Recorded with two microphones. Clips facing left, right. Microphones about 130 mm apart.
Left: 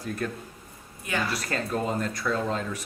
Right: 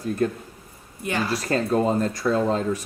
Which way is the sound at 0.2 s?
35° right (ahead or behind).